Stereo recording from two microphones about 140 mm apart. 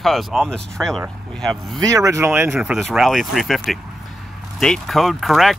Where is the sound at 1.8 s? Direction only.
25° right (ahead or behind).